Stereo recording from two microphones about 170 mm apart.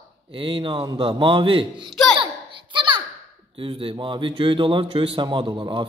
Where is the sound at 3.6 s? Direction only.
30° right (ahead or behind).